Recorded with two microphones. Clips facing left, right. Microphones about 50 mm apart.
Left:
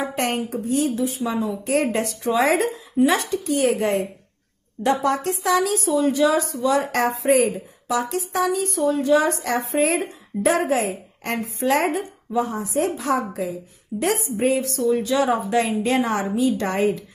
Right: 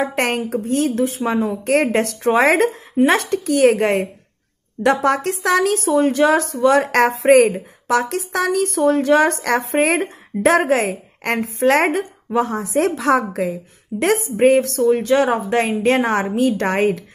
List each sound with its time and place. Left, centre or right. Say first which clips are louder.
0.0 s speech: right 4 dB; right
3.4 s speech: right 7 dB; right